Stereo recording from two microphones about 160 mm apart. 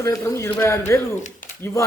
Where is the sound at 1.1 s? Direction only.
50° left (ahead or behind).